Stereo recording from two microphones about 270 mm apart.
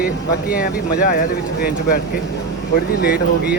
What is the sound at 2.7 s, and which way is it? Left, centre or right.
Speech, left.